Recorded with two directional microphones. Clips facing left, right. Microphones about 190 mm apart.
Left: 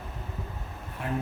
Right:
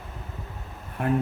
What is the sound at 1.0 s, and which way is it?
Speech, 55° right (ahead or behind).